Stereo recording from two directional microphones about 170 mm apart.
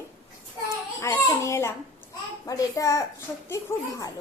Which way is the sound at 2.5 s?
20° left (ahead or behind).